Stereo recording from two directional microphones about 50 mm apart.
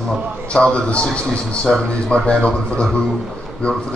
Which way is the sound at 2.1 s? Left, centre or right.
Centre.